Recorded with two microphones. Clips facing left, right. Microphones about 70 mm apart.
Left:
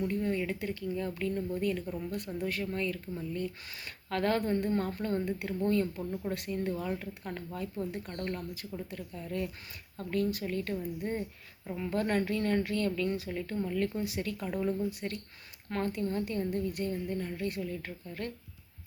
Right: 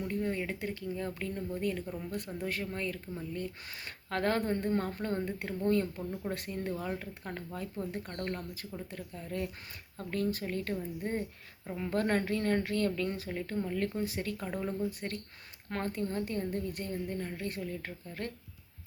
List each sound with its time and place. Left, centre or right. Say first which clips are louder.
0.0 s a woman's voice: left 2 dB; right
11.9 s a woman's voice: even; right